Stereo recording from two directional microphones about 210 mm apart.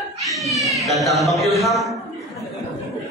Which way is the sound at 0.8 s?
Centre (ahead or behind).